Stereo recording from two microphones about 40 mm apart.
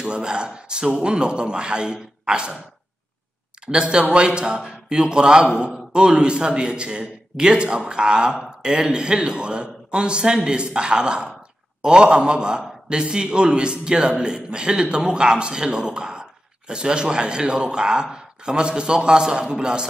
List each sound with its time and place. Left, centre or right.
0.0 s a man's voice: right
3.6 s a man's voice: right